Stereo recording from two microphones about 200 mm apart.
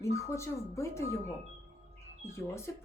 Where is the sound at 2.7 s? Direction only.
15° left (ahead or behind).